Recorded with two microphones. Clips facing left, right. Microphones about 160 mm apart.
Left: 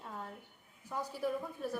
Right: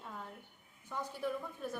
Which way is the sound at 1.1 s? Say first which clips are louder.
Left 3 dB; 5° left (ahead or behind).